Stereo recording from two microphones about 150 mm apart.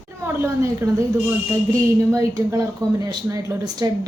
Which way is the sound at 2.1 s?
25° right (ahead or behind).